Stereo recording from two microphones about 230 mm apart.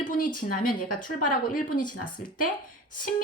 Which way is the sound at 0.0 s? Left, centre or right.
Left.